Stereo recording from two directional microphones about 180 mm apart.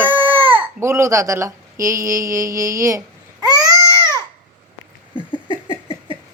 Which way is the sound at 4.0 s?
20° right (ahead or behind).